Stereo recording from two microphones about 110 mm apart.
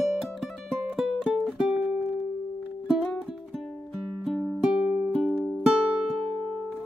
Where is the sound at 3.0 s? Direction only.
5° left (ahead or behind).